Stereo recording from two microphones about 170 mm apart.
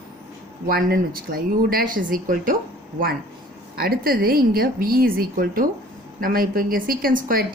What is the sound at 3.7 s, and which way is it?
A woman's voice, 60° right (ahead or behind).